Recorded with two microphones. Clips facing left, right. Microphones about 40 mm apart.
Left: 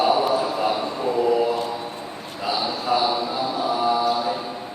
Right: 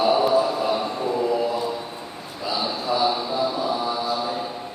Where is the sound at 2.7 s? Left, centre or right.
Left.